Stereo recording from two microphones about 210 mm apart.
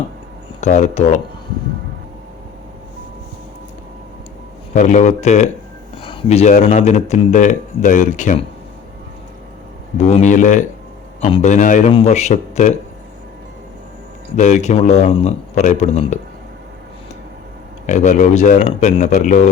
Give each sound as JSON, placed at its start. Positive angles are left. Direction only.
{"t": 0.6, "sound": "speech", "side_deg": 35}
{"t": 4.7, "sound": "speech", "side_deg": 35}
{"t": 10.0, "sound": "speech", "side_deg": 30}
{"t": 14.3, "sound": "speech", "side_deg": 35}
{"t": 17.8, "sound": "speech", "side_deg": 35}